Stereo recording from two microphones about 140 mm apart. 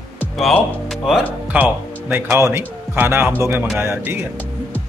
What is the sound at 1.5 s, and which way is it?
Speech, 10° right (ahead or behind).